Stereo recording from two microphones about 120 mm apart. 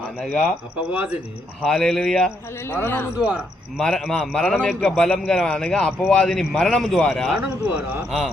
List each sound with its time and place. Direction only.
0.2 s speech: 5° right (ahead or behind)
1.6 s speech: 5° left (ahead or behind)
2.6 s a man's voice: 20° left (ahead or behind)
3.2 s speech: 10° right (ahead or behind)
3.8 s a man's voice: 5° left (ahead or behind)